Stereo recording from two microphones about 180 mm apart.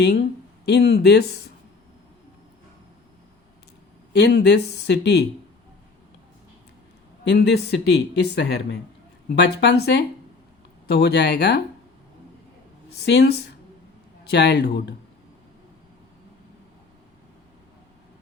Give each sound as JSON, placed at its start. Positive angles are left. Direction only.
{"t": 0.6, "sound": "speech", "side_deg": 65}
{"t": 4.1, "sound": "speech", "side_deg": 65}
{"t": 7.3, "sound": "speech", "side_deg": 70}
{"t": 13.0, "sound": "speech", "side_deg": 65}